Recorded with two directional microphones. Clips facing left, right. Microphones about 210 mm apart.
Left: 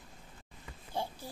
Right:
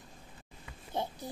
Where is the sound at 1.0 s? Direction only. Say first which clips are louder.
Right 2 dB; 20° right (ahead or behind).